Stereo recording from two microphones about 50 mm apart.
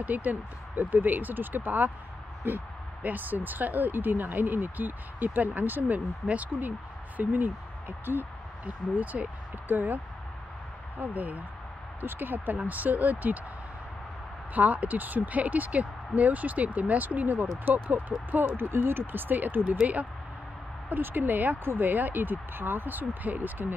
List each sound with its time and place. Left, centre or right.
0.0 s speech: right
3.0 s speech: right
8.0 s speech: right
8.6 s speech: right
11.0 s speech: right
14.5 s speech: right
18.9 s speech: right
20.9 s speech: right